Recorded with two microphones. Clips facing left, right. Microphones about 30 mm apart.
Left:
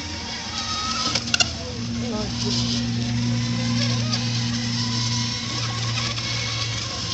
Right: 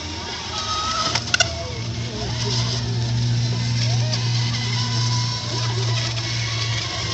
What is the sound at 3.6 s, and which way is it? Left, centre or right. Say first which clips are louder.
Vehicle: left 2 dB; left.